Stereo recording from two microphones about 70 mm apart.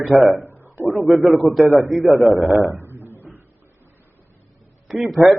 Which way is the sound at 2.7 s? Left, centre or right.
Right.